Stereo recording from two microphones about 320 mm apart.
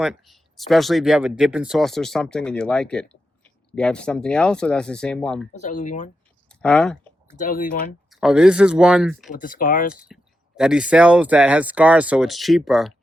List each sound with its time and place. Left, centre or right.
0.0 s speech: centre
5.5 s speech: left
6.6 s speech: centre
7.3 s speech: left
8.1 s speech: centre
9.3 s speech: left
9.9 s speech: centre